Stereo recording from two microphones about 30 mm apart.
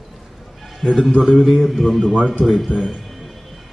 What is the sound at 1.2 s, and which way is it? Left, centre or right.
A man's voice, centre.